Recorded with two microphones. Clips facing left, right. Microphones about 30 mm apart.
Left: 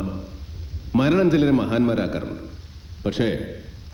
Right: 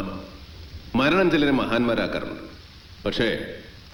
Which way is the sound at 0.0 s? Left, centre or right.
Right.